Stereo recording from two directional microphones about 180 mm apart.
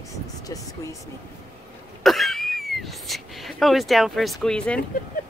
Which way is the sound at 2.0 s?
Centre (ahead or behind).